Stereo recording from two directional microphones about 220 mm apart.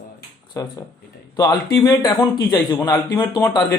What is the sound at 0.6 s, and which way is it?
Speech, 15° left (ahead or behind).